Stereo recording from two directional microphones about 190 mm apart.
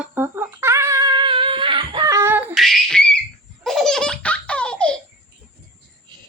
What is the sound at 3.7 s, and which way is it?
Laughter, centre (ahead or behind).